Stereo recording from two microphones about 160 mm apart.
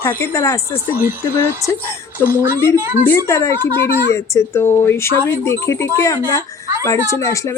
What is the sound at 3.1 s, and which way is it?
A woman's voice, 20° left (ahead or behind).